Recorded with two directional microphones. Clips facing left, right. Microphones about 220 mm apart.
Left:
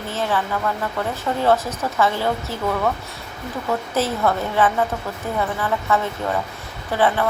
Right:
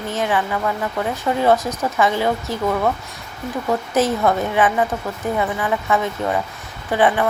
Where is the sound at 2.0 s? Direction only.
15° right (ahead or behind).